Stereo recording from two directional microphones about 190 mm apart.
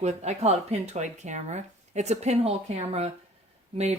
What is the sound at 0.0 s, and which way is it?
Speech, 35° right (ahead or behind).